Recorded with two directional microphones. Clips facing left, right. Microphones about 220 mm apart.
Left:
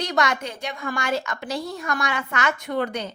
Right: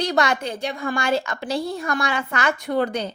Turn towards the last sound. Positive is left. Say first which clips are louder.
# right 3 dB
turn(degrees=-35)  # may be behind; listen again after turning